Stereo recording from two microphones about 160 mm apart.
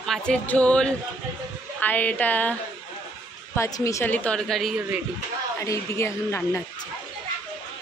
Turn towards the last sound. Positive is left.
turn(degrees=15)  # may be behind; listen again after turning